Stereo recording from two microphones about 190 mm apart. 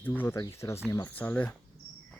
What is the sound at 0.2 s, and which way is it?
Speech, 15° left (ahead or behind).